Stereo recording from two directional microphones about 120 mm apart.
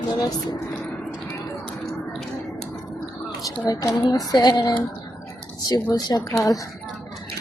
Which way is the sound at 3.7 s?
30° left (ahead or behind).